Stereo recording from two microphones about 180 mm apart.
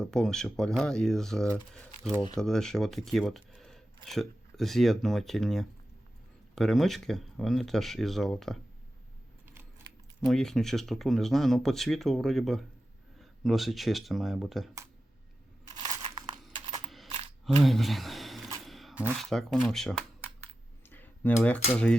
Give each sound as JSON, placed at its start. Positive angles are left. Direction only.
{"t": 0.0, "sound": "speech", "side_deg": 5}
{"t": 10.2, "sound": "speech", "side_deg": 0}
{"t": 15.7, "sound": "crunch", "side_deg": -25}
{"t": 17.4, "sound": "a sound", "side_deg": 0}
{"t": 19.1, "sound": "speech", "side_deg": 0}
{"t": 20.9, "sound": "a sound", "side_deg": 10}
{"t": 21.3, "sound": "speech", "side_deg": 5}